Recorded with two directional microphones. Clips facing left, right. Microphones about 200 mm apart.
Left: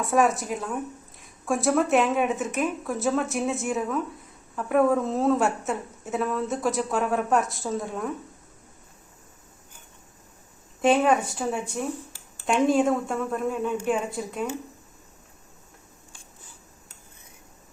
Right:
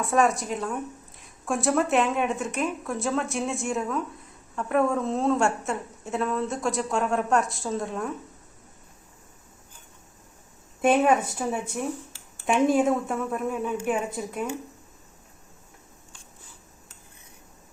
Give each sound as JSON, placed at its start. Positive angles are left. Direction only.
{"t": 0.0, "sound": "a woman's voice", "side_deg": 0}
{"t": 10.8, "sound": "speech", "side_deg": -5}
{"t": 12.5, "sound": "a woman's voice", "side_deg": -5}